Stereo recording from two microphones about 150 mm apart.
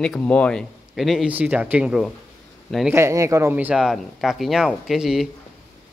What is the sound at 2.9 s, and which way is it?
Speech, 20° right (ahead or behind).